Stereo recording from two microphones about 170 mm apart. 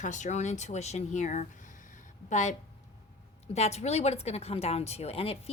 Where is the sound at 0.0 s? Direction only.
45° left (ahead or behind).